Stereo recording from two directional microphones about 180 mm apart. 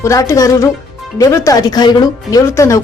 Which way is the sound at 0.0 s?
15° left (ahead or behind).